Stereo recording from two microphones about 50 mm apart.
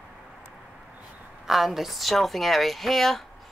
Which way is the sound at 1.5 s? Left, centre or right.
Centre.